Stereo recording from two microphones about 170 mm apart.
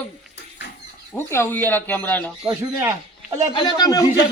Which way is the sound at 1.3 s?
10° left (ahead or behind).